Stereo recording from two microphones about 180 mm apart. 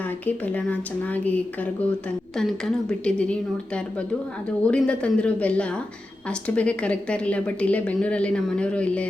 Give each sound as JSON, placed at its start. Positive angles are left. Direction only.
{"t": 0.3, "sound": "a woman's voice", "side_deg": 10}
{"t": 4.6, "sound": "a woman's voice", "side_deg": 5}